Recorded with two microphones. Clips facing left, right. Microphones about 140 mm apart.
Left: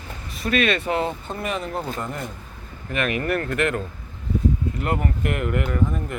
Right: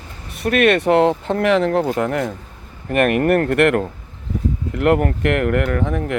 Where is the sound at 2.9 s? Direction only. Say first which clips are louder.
Right 9 dB; 55° right (ahead or behind).